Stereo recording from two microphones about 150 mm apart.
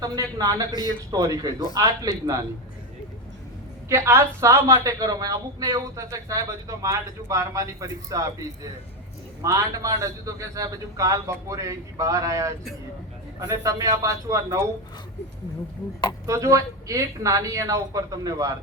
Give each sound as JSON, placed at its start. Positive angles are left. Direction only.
{"t": 0.0, "sound": "a woman's voice", "side_deg": -25}
{"t": 0.7, "sound": "a man's voice", "side_deg": 25}
{"t": 1.1, "sound": "a woman's voice", "side_deg": -25}
{"t": 3.8, "sound": "a woman's voice", "side_deg": -15}
{"t": 16.2, "sound": "a woman's voice", "side_deg": -20}